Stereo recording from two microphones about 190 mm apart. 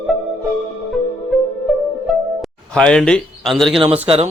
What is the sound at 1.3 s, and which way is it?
Music, centre (ahead or behind).